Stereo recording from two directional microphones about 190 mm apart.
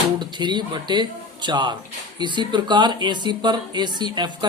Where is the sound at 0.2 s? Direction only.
25° right (ahead or behind).